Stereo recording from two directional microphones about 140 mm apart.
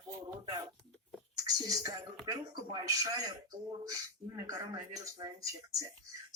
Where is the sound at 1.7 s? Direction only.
25° right (ahead or behind).